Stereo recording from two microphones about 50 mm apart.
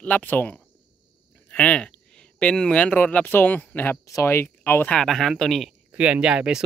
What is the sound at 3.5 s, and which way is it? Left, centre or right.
Speech, left.